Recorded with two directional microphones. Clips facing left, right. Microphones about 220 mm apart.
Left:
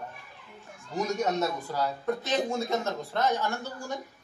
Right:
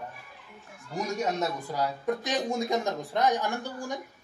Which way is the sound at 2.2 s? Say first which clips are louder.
Even; 15° right (ahead or behind).